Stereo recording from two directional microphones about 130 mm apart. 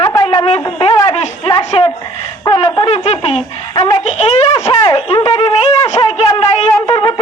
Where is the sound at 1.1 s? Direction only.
45° left (ahead or behind).